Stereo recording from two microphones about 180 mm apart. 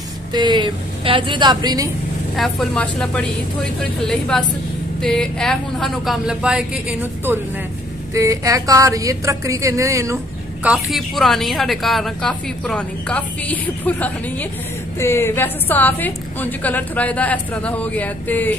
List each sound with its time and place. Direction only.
0.3 s a woman's voice: 25° right (ahead or behind)
2.3 s a woman's voice: centre (ahead or behind); by 10.1 s 15° right (ahead or behind)
10.6 s a woman's voice: centre (ahead or behind)